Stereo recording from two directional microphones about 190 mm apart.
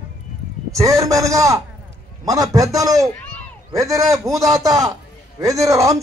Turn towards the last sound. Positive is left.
turn(degrees=-15)  # may be behind; listen again after turning